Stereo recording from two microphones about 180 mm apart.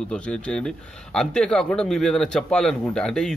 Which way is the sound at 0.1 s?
5° left (ahead or behind).